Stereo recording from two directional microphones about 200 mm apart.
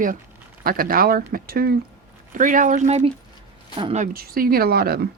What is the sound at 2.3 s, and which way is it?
Speech, 40° right (ahead or behind).